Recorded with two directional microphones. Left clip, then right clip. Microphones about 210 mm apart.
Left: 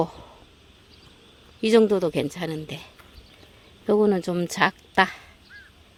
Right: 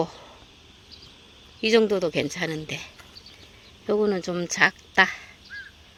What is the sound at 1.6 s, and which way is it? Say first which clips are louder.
A woman's voice: left 2 dB; 25° left (ahead or behind).